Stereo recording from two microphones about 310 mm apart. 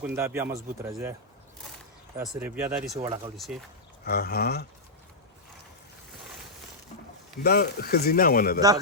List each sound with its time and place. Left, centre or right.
0.0 s speech: centre
2.4 s speech: centre
3.0 s speech: centre
3.3 s speech: centre
4.0 s speech: left
7.4 s speech: left